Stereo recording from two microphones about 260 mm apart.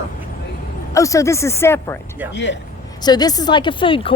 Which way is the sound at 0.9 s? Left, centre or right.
Centre.